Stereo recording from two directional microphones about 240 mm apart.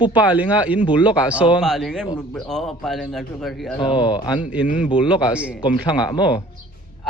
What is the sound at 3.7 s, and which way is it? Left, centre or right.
Speech, centre.